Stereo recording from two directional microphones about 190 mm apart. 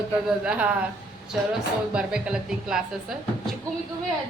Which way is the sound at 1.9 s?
5° right (ahead or behind).